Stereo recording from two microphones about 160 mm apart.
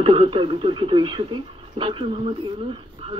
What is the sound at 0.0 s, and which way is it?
Speech, 30° right (ahead or behind).